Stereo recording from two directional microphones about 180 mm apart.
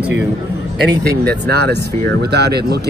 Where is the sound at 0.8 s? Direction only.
65° right (ahead or behind).